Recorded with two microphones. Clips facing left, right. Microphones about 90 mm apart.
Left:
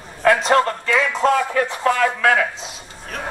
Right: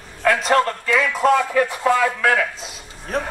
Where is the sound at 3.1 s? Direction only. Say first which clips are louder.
Right 5 dB; 35° right (ahead or behind).